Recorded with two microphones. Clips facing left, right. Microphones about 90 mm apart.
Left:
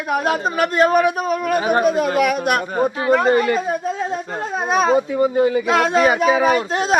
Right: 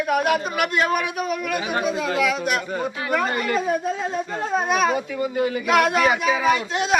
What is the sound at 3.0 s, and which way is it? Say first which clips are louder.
A man's voice: left 9 dB; 25° left (ahead or behind).